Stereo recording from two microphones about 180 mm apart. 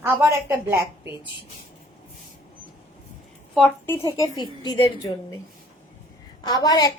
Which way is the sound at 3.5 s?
10° left (ahead or behind).